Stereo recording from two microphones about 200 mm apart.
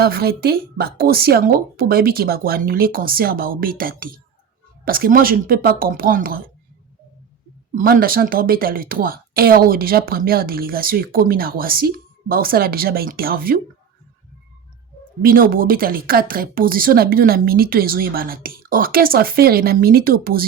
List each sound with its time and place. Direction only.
0.0 s a woman's voice: 50° right (ahead or behind)
7.8 s a woman's voice: 45° right (ahead or behind)
15.2 s a woman's voice: 45° right (ahead or behind)